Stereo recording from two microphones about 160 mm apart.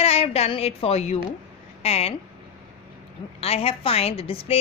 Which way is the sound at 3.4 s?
40° left (ahead or behind).